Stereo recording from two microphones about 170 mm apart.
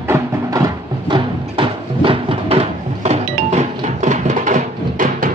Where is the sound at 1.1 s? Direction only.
30° right (ahead or behind).